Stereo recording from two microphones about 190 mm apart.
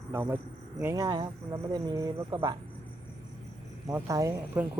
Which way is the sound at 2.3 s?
20° right (ahead or behind).